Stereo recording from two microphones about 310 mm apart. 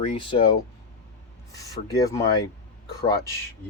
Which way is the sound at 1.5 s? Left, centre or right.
Centre.